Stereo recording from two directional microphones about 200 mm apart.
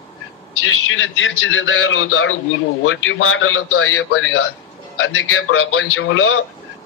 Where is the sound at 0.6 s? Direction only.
75° left (ahead or behind).